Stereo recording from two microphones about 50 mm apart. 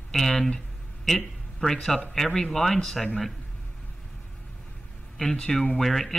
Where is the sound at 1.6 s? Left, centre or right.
Centre.